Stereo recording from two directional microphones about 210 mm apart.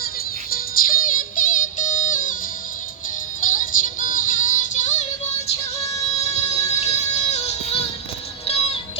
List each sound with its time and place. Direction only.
0.5 s music: 40° left (ahead or behind)
3.4 s music: 40° left (ahead or behind)
6.1 s music: 30° left (ahead or behind)